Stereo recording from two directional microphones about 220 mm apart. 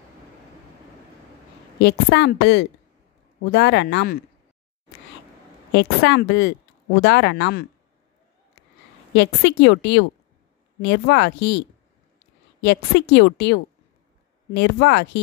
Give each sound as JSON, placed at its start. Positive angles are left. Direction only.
{"t": 1.8, "sound": "a woman's voice", "side_deg": 50}
{"t": 5.7, "sound": "a woman's voice", "side_deg": 50}
{"t": 9.1, "sound": "a woman's voice", "side_deg": 55}
{"t": 12.6, "sound": "a woman's voice", "side_deg": 50}